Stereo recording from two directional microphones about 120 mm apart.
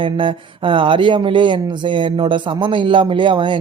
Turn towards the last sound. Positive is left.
turn(degrees=-45)  # may be behind; listen again after turning